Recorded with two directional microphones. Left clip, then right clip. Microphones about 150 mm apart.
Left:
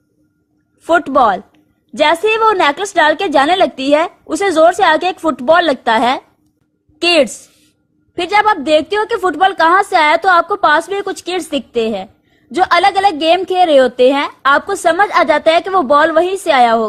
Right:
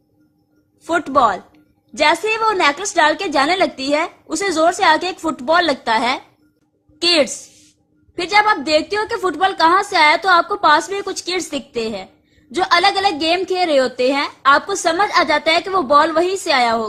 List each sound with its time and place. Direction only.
0.8 s a woman's voice: 45° left (ahead or behind)